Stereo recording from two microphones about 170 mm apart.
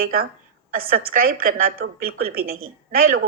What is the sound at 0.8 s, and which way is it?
A woman's voice, 60° right (ahead or behind).